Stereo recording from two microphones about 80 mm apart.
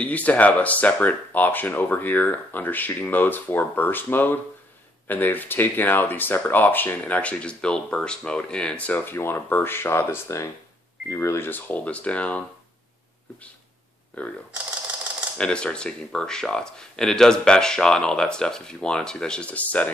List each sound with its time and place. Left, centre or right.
0.0 s speech: centre
9.1 s speech: left
14.2 s speech: centre
15.3 s speech: centre